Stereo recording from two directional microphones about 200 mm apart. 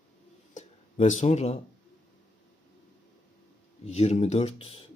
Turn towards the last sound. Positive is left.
turn(degrees=30)  # may be behind; listen again after turning